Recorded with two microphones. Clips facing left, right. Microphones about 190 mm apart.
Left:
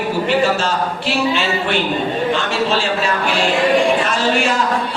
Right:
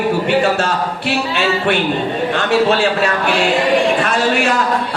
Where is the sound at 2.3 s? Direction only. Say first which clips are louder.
Right 4 dB; 60° right (ahead or behind).